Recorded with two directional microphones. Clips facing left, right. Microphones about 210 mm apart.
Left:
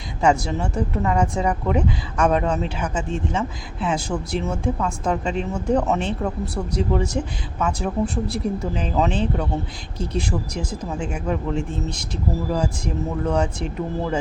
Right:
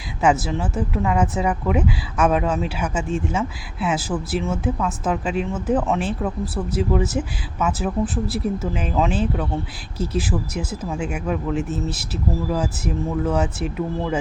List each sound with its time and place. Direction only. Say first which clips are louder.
0.2 s speech: even; 5° right (ahead or behind)